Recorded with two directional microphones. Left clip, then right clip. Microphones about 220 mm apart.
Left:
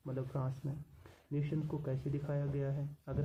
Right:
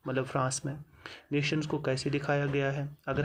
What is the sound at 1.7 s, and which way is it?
Speech, 30° right (ahead or behind).